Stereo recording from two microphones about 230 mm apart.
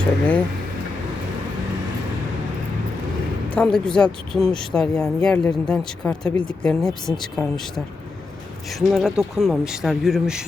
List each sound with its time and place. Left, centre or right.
3.5 s speech: centre
8.7 s speech: centre